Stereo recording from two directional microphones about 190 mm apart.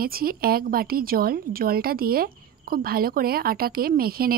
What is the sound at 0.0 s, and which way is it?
A woman's voice, 50° right (ahead or behind).